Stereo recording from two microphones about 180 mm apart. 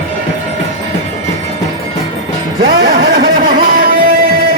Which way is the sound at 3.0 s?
55° right (ahead or behind).